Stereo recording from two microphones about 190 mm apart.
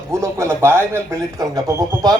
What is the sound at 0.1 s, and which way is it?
A man's voice, 15° right (ahead or behind).